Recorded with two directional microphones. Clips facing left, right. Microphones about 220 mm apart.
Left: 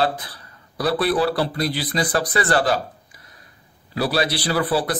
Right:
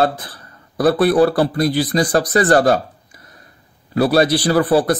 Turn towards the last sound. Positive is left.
turn(degrees=-45)  # may be behind; listen again after turning